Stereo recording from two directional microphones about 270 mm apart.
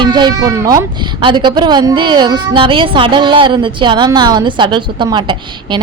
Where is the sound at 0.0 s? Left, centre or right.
Centre.